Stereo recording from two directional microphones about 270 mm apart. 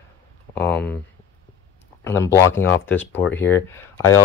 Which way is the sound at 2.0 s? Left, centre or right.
Centre.